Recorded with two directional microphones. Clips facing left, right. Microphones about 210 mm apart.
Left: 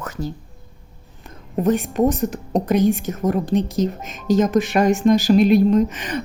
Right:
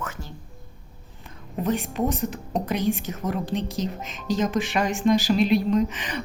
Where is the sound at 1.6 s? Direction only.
45° left (ahead or behind).